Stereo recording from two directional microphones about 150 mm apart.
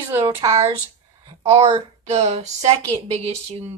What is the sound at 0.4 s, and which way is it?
Speech, 35° right (ahead or behind).